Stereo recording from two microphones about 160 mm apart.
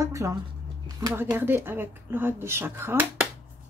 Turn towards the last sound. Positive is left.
turn(degrees=-15)  # may be behind; listen again after turning